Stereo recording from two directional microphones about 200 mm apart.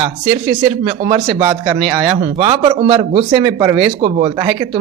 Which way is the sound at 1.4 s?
20° right (ahead or behind).